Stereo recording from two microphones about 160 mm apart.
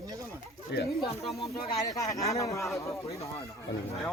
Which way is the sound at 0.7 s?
90° left.